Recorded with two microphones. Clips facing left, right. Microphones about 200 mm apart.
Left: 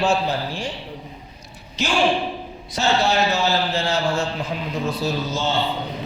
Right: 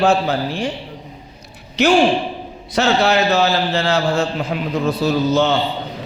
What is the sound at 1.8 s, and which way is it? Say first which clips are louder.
A man's voice: right 7 dB; 65° right (ahead or behind).